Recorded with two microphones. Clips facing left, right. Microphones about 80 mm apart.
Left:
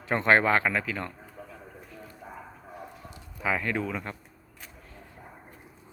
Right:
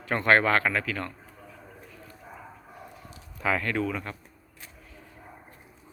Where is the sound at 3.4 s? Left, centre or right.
Centre.